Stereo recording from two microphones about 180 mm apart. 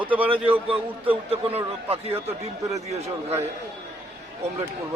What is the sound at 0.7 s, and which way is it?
A man's voice, 30° right (ahead or behind).